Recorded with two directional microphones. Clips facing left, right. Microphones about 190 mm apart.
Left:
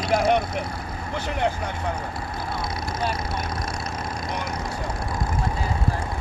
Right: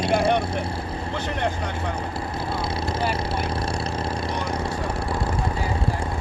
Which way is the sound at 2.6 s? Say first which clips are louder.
Right 2 dB; 30° right (ahead or behind).